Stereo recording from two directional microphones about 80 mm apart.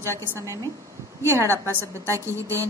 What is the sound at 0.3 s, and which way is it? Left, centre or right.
Speech, right.